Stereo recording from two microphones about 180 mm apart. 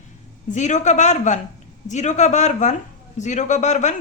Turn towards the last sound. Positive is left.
turn(degrees=40)  # may be behind; listen again after turning